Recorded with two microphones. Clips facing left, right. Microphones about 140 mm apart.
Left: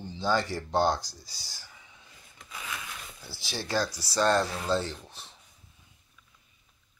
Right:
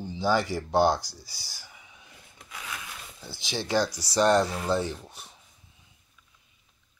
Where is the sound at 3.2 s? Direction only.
20° right (ahead or behind).